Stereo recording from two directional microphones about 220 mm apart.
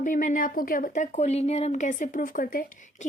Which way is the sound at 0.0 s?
35° left (ahead or behind).